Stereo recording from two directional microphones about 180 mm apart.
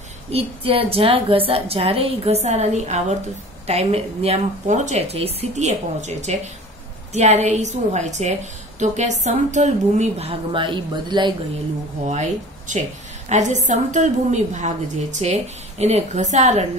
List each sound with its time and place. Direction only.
0.3 s a woman's voice: 30° right (ahead or behind)
12.1 s a woman's voice: 40° right (ahead or behind)